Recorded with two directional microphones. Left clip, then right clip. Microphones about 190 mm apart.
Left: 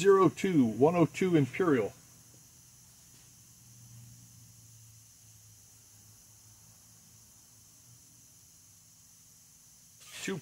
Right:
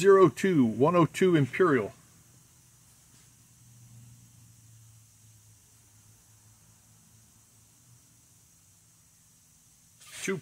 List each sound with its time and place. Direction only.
0.0 s speech: 50° right (ahead or behind)